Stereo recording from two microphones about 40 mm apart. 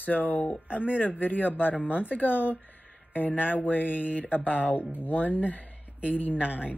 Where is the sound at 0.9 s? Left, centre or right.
Left.